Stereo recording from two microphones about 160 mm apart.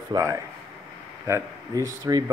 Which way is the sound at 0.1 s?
20° right (ahead or behind).